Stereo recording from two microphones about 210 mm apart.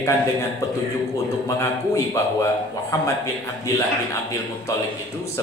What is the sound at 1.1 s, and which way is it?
A man's voice, 15° left (ahead or behind).